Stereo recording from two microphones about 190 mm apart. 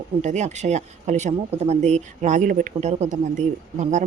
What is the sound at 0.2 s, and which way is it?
A woman's voice, 40° right (ahead or behind).